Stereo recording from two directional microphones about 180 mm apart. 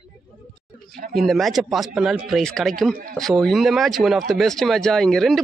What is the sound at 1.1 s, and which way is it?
Speech, centre (ahead or behind).